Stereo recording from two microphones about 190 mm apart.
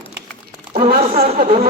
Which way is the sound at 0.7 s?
30° right (ahead or behind).